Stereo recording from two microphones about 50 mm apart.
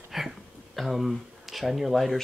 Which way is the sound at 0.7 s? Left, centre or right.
Centre.